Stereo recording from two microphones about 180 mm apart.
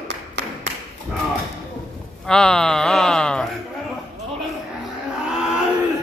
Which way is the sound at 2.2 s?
5° left (ahead or behind).